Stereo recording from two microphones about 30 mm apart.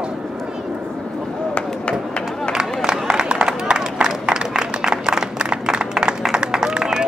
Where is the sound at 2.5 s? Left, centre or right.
Right.